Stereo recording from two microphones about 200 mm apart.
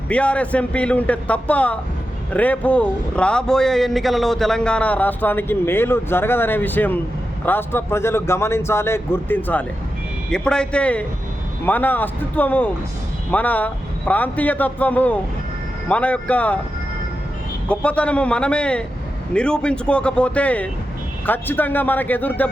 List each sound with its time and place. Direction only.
0.1 s a man's voice: 5° left (ahead or behind)
17.7 s a man's voice: 5° left (ahead or behind)